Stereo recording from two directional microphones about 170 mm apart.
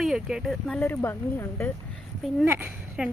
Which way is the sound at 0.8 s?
15° left (ahead or behind).